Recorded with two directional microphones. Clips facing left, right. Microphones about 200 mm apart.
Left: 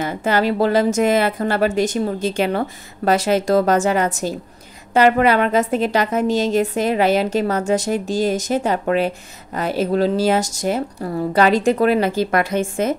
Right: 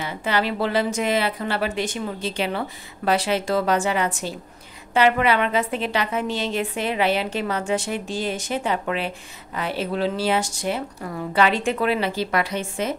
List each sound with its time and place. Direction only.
0.0 s a woman's voice: 45° left (ahead or behind)